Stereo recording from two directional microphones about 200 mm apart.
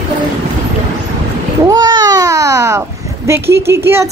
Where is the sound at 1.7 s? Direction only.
20° right (ahead or behind).